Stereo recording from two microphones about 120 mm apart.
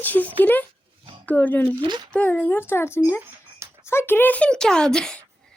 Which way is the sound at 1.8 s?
40° right (ahead or behind).